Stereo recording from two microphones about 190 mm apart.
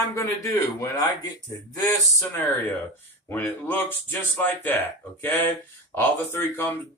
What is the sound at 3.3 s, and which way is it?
Speech, 10° left (ahead or behind).